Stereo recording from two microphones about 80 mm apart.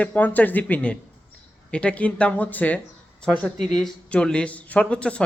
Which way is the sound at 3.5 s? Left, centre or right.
Centre.